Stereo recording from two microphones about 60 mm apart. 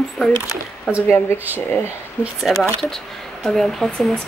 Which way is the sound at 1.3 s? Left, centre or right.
Right.